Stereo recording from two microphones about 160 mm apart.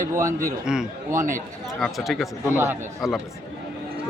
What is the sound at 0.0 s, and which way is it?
Speech, 20° right (ahead or behind).